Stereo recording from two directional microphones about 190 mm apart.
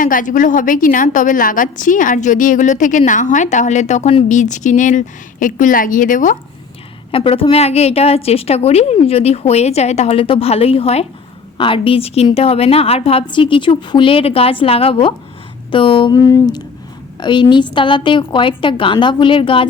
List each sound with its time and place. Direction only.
0.0 s a woman's voice: 45° left (ahead or behind)
7.1 s a woman's voice: 30° left (ahead or behind)